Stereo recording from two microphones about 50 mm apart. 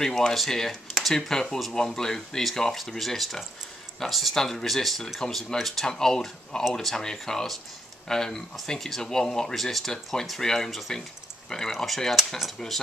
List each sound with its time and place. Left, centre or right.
0.0 s speech: centre